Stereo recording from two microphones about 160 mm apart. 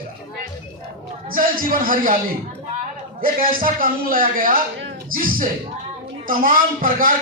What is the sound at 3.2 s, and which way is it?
A man's voice, 60° right (ahead or behind).